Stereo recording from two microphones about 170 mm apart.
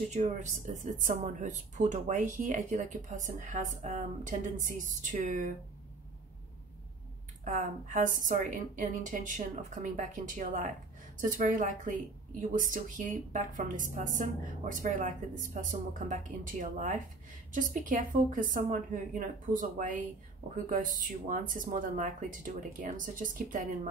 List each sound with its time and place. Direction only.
0.1 s speech: 45° right (ahead or behind)
7.4 s speech: 50° right (ahead or behind)